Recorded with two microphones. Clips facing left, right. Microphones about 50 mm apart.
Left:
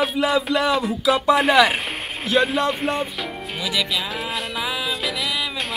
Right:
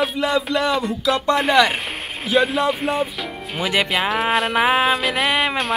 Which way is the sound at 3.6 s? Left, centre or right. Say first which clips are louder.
Right 5 dB; right.